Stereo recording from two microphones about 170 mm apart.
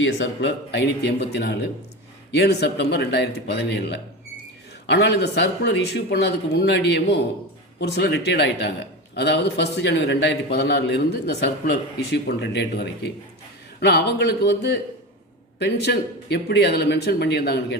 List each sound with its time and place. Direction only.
0.0 s a man's voice: 90° left
7.8 s a man's voice: 80° left